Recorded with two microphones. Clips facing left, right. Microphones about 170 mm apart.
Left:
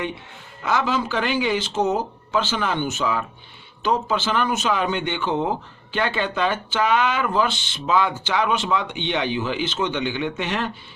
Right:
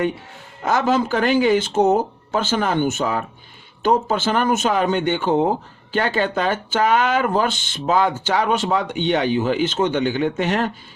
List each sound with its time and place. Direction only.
0.6 s speech: 45° right (ahead or behind)